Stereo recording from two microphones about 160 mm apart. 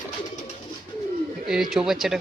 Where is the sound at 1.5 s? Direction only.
5° right (ahead or behind).